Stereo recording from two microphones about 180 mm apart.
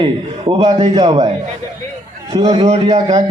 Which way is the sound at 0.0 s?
30° right (ahead or behind).